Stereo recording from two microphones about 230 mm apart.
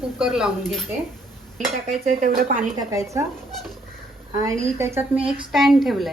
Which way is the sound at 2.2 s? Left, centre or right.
Right.